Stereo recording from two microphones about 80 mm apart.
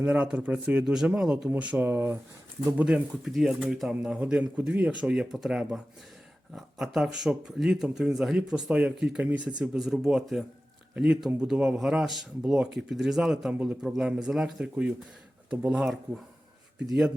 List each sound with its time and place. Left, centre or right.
0.0 s speech: centre
1.5 s speech: centre
2.8 s speech: centre
4.2 s speech: centre
13.5 s speech: centre
13.8 s speech: centre